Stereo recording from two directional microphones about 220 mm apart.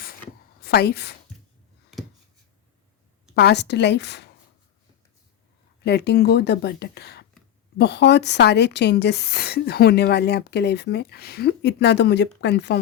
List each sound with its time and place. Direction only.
0.6 s a woman's voice: 45° left (ahead or behind)
3.3 s a woman's voice: 50° left (ahead or behind)
5.8 s a woman's voice: 50° left (ahead or behind)